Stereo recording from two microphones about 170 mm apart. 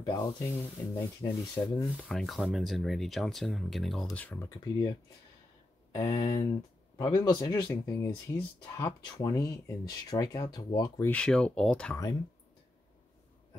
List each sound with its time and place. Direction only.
0.0 s speech: 25° left (ahead or behind)
2.0 s speech: 5° left (ahead or behind)
5.9 s speech: 25° left (ahead or behind)
11.1 s speech: 5° left (ahead or behind)